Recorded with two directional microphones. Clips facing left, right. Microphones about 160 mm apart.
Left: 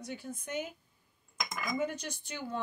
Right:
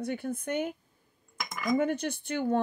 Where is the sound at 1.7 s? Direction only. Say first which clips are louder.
Right 9 dB; 55° right (ahead or behind).